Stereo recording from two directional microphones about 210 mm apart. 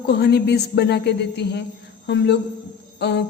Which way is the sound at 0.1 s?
50° left (ahead or behind).